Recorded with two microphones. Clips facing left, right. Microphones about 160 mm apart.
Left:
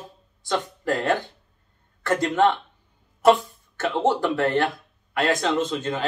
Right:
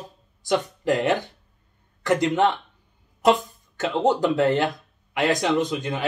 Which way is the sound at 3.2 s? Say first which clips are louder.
Left 2 dB; 15° right (ahead or behind).